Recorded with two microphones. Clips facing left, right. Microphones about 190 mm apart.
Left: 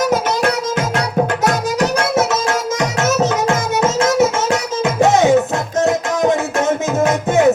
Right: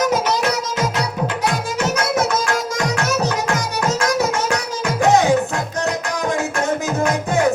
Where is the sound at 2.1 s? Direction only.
20° left (ahead or behind).